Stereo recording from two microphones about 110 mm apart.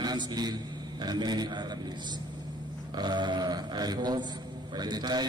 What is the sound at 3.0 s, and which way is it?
Speech, 40° right (ahead or behind).